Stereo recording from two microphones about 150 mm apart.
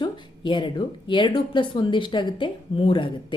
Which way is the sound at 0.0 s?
30° left (ahead or behind).